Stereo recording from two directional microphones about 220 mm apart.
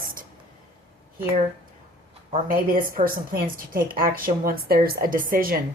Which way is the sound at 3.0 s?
40° right (ahead or behind).